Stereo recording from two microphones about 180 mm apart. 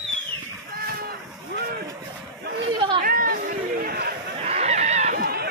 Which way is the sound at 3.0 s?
55° right (ahead or behind).